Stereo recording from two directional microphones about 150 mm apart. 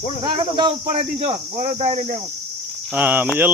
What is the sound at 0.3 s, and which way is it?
Speech, 35° right (ahead or behind).